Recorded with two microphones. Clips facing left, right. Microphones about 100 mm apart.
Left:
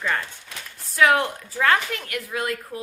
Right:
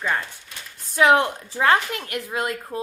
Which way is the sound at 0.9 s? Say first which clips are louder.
Right 2 dB; 25° right (ahead or behind).